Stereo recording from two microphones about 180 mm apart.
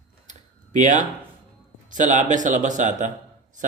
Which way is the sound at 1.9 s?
45° right (ahead or behind).